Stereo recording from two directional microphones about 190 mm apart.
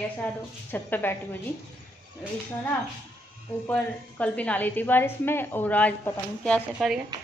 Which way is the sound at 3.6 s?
5° left (ahead or behind).